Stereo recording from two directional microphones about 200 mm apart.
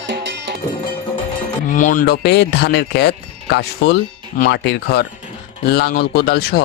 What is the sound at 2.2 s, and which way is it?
Speech, 55° left (ahead or behind).